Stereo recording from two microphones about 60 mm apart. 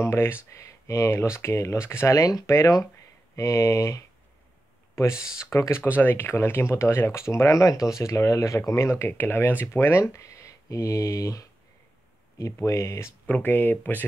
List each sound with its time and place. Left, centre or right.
0.0 s speech: left
2.1 s speech: left
5.7 s speech: left
10.2 s speech: left
12.6 s speech: left
13.3 s speech: left